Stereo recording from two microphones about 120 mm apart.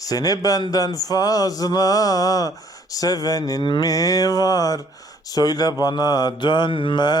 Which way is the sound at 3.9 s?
30° left (ahead or behind).